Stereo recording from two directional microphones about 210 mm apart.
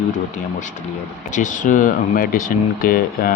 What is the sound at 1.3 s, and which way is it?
Speech, 35° left (ahead or behind).